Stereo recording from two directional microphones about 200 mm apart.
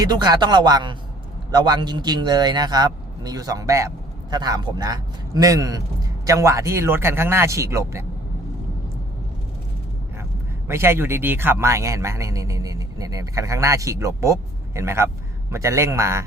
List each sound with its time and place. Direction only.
0.0 s speech: 20° right (ahead or behind)
10.7 s speech: 10° right (ahead or behind)